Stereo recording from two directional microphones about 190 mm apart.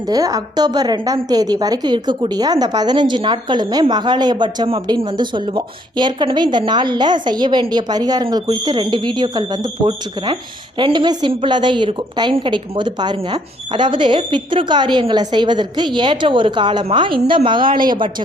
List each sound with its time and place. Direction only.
0.1 s a woman's voice: 20° right (ahead or behind)